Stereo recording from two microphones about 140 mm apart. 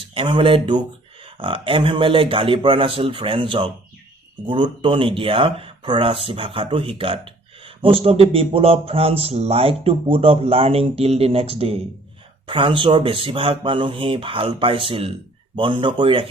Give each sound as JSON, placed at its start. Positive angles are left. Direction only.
{"t": 0.0, "sound": "speech", "side_deg": -40}